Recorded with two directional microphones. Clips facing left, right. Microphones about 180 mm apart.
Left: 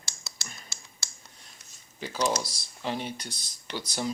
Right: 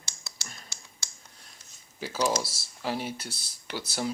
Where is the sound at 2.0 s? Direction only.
5° right (ahead or behind).